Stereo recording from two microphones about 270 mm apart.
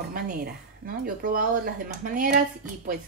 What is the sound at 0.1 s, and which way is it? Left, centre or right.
A woman's voice, right.